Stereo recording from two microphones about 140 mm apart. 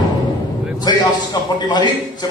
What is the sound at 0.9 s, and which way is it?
Speech, 30° left (ahead or behind).